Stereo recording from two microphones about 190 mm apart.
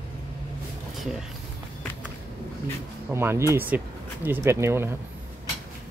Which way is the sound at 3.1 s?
15° right (ahead or behind).